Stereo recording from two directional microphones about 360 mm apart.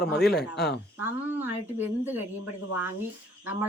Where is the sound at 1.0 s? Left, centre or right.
Centre.